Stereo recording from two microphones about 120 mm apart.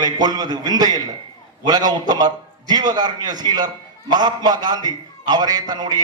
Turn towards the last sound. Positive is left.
turn(degrees=-35)  # may be behind; listen again after turning